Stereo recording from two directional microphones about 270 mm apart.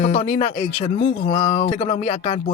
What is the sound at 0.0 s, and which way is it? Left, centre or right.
Speech, left.